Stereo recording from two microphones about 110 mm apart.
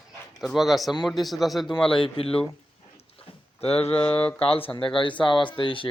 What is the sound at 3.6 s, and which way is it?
Speech, 65° left (ahead or behind).